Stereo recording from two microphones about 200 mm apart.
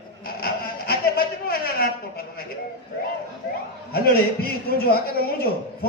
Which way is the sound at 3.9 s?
50° left (ahead or behind).